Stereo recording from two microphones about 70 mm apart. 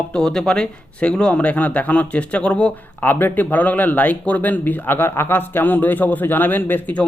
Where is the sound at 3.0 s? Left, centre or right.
Left.